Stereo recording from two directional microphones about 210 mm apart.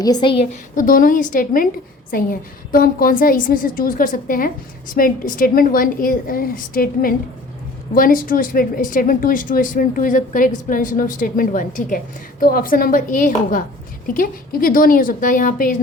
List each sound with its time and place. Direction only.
0.0 s a woman's voice: 20° left (ahead or behind)
0.8 s a woman's voice: 40° left (ahead or behind)